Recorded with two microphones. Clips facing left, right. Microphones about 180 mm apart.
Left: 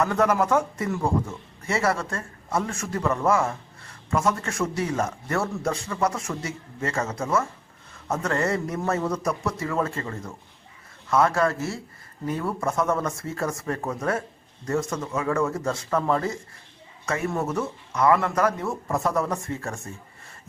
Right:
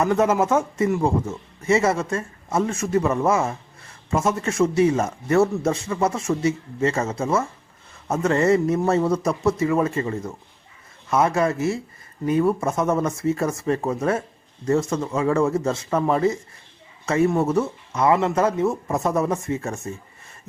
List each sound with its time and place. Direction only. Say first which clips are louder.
0.0 s speech: right 3 dB; 20° right (ahead or behind)